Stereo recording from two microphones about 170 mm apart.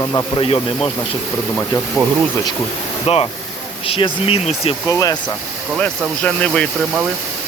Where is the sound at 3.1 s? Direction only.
35° left (ahead or behind).